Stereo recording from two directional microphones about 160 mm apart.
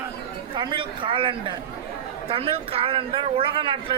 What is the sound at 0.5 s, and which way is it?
Speech, 30° right (ahead or behind).